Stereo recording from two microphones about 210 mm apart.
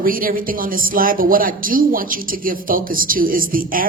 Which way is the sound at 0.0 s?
40° right (ahead or behind).